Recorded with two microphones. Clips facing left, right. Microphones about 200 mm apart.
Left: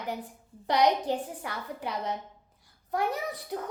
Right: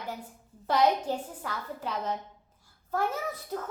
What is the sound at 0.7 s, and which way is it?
A child's voice, 15° left (ahead or behind).